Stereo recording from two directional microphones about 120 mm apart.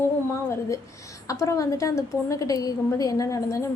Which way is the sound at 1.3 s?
25° left (ahead or behind).